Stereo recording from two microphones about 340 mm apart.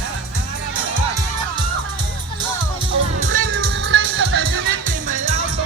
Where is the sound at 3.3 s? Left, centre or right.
Right.